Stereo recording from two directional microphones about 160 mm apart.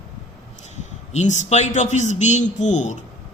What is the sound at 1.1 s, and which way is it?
A man's voice, 50° left (ahead or behind).